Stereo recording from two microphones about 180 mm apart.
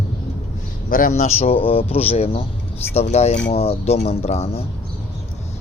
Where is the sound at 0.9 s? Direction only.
45° left (ahead or behind).